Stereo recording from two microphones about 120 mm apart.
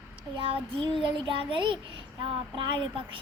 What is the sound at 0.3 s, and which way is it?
Speech, 45° right (ahead or behind).